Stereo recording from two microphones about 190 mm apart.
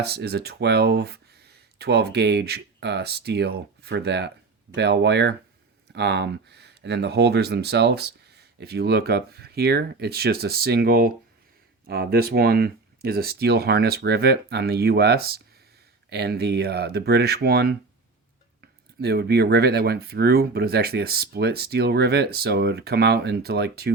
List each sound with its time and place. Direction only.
0.0 s speech: 60° right (ahead or behind)